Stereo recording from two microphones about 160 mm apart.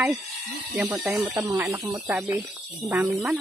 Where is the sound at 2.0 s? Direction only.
10° right (ahead or behind).